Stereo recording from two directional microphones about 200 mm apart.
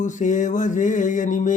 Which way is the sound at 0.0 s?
40° left (ahead or behind).